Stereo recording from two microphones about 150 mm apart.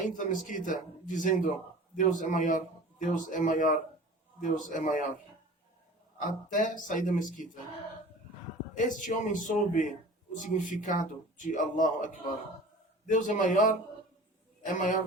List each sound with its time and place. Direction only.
0.0 s a man's voice: 60° left (ahead or behind)
6.2 s a man's voice: 60° left (ahead or behind)
8.7 s a man's voice: 60° left (ahead or behind)